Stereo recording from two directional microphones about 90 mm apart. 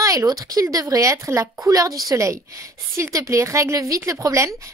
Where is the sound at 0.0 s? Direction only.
35° right (ahead or behind).